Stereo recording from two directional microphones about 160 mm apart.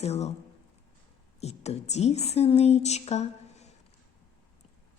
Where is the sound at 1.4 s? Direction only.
40° left (ahead or behind).